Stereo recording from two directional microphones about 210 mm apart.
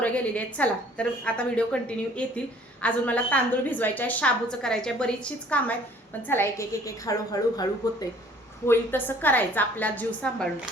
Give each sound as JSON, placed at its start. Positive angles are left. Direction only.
{"t": 0.0, "sound": "a woman's voice", "side_deg": 5}